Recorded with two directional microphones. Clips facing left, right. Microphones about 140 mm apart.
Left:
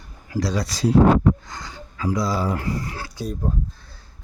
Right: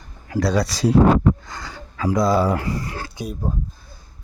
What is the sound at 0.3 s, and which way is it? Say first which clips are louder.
Speech: right 4 dB; 65° right (ahead or behind).